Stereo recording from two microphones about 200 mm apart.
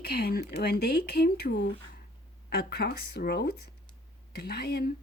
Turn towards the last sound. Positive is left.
turn(degrees=55)  # may be behind; listen again after turning